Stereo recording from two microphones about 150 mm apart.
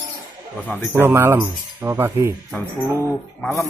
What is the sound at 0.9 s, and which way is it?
Speech, 15° right (ahead or behind).